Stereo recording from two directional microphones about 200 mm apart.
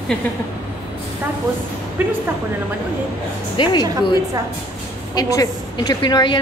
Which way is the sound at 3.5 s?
25° left (ahead or behind).